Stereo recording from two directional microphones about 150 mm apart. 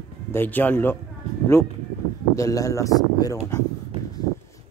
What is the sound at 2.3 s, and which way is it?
Speech, 20° left (ahead or behind).